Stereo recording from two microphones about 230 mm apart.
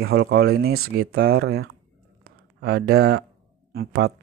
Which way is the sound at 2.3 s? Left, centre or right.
Right.